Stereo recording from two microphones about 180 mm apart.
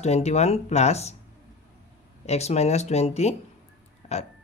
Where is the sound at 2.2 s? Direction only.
35° left (ahead or behind).